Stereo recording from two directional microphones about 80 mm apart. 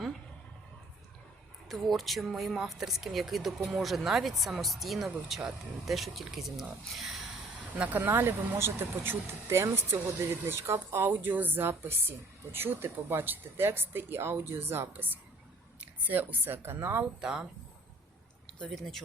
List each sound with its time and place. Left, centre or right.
1.6 s speech: centre
7.8 s speech: right
17.0 s speech: centre
18.7 s speech: centre